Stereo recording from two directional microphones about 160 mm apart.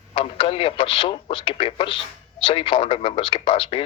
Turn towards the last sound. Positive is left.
turn(degrees=35)  # may be behind; listen again after turning